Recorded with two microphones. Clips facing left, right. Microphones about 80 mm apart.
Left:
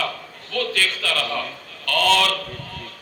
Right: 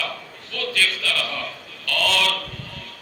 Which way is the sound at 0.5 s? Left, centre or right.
Left.